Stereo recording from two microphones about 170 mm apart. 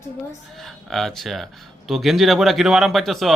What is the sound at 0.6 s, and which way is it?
Speech, centre (ahead or behind).